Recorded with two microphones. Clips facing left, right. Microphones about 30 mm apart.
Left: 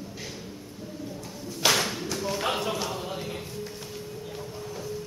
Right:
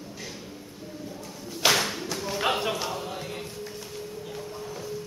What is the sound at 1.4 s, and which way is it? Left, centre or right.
Clapping, centre.